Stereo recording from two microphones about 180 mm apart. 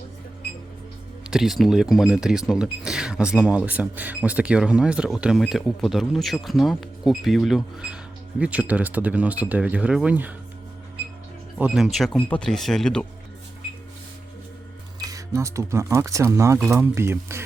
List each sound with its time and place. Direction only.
1.3 s speech: centre (ahead or behind)
11.5 s speech: 5° right (ahead or behind)
14.9 s speech: 20° right (ahead or behind)